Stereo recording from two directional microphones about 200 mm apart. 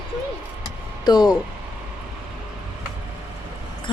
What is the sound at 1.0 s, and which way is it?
Speech, 20° left (ahead or behind).